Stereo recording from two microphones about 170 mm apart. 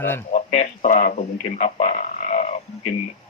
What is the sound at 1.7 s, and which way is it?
Frog, 45° left (ahead or behind).